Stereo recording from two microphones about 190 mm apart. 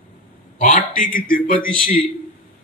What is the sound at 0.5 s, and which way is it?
Speech, 45° left (ahead or behind).